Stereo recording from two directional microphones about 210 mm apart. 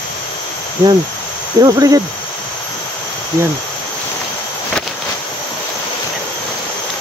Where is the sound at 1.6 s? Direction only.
15° right (ahead or behind).